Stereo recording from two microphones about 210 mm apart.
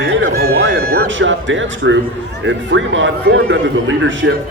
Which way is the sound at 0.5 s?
70° right (ahead or behind).